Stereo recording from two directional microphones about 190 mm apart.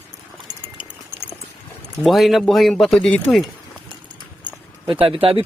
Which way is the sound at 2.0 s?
Centre (ahead or behind).